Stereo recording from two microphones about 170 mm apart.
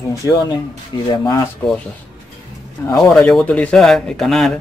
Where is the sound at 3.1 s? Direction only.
5° left (ahead or behind).